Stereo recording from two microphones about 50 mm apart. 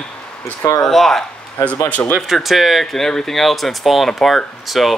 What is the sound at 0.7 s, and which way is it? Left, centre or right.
Speech, centre.